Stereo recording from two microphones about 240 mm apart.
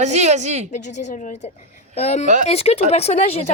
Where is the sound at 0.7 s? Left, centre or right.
Left.